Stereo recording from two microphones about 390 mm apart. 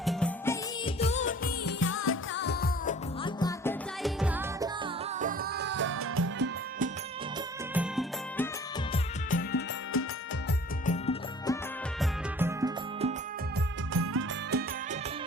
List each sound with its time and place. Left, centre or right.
0.0 s music of bollywood: centre; by 2.9 s left
3.2 s music: centre
5.2 s music: right
7.7 s music: centre
8.9 s music: left
10.8 s music: centre
11.9 s music: centre
13.9 s music: right